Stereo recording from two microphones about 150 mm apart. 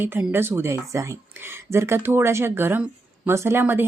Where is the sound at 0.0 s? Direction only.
15° right (ahead or behind).